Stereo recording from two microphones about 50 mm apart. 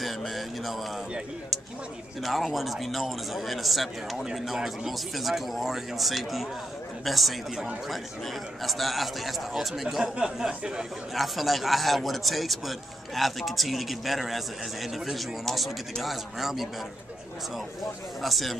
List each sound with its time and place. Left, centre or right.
0.0 s speech: centre
2.2 s a man's voice: centre
10.1 s speech: centre
11.1 s a man's voice: centre
18.2 s a man's voice: centre